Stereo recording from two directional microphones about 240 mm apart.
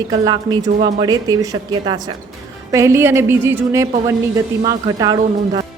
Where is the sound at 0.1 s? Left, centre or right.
Centre.